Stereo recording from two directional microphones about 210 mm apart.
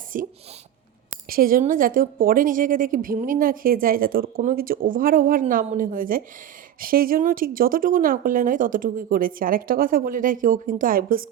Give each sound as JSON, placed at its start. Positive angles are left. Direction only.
{"t": 0.1, "sound": "speech", "side_deg": -40}